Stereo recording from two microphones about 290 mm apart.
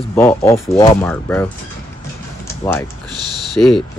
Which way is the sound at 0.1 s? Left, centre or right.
Centre.